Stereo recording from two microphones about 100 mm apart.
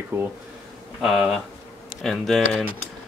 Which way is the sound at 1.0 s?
5° right (ahead or behind).